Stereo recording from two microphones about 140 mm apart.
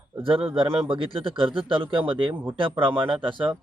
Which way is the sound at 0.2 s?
40° right (ahead or behind).